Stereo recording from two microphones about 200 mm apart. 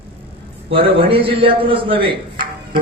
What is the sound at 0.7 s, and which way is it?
A man's voice, 25° right (ahead or behind).